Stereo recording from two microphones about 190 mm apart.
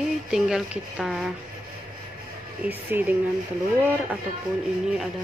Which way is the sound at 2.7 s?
10° right (ahead or behind).